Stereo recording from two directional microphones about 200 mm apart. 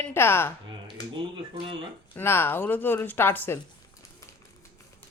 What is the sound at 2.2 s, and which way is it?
Speech, 10° left (ahead or behind).